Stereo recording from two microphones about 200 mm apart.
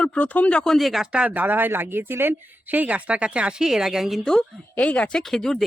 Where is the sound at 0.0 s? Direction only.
5° left (ahead or behind).